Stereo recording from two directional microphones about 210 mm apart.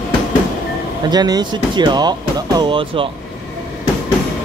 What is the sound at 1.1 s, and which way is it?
Speech, 20° right (ahead or behind).